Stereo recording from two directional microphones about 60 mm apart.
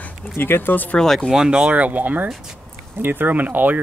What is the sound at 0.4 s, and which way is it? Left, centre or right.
Speech, left.